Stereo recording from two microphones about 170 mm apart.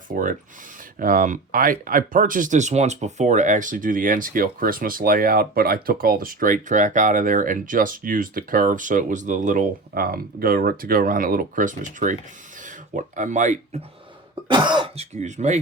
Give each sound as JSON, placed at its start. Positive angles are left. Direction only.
{"t": 0.1, "sound": "speech", "side_deg": -50}
{"t": 14.4, "sound": "cough", "side_deg": -25}
{"t": 15.1, "sound": "speech", "side_deg": -45}